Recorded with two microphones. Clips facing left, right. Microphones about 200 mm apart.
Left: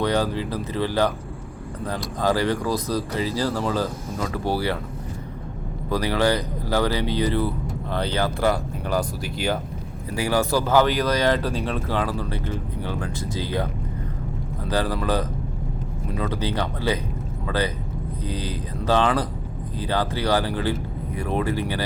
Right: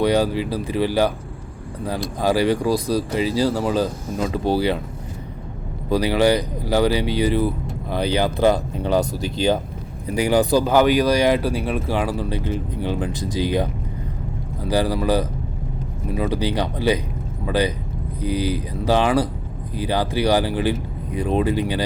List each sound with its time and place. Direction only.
0.0 s speech: 10° right (ahead or behind)
2.2 s speech: 10° right (ahead or behind)
5.9 s speech: 15° right (ahead or behind)